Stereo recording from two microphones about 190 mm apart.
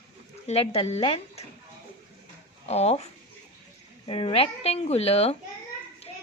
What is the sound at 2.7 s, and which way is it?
Speech, 35° left (ahead or behind).